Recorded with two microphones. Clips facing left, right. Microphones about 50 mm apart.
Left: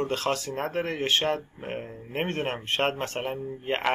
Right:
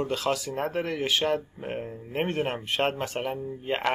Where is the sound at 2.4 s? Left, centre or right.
Left.